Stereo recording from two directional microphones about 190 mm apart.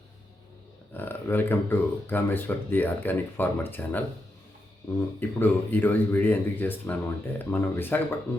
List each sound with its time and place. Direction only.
0.9 s speech: 10° left (ahead or behind)